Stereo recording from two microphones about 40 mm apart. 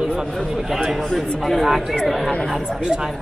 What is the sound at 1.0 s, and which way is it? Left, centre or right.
Speech, centre.